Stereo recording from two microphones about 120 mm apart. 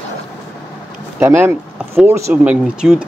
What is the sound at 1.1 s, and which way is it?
Speech, 15° right (ahead or behind).